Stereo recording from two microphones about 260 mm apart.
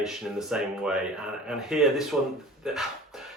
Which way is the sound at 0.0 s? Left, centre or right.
Centre.